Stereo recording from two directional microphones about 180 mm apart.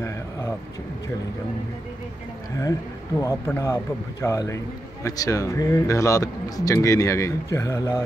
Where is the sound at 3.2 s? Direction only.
15° left (ahead or behind).